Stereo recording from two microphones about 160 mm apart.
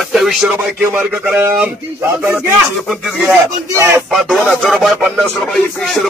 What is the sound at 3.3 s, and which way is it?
Speech, 15° right (ahead or behind).